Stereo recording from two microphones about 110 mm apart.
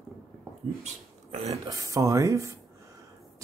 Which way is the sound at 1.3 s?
70° right (ahead or behind).